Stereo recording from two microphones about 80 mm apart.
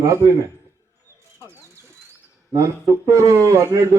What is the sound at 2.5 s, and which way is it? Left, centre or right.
Speech, right.